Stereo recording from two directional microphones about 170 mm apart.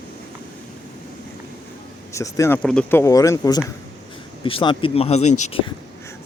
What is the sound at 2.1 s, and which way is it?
Speech, 20° left (ahead or behind).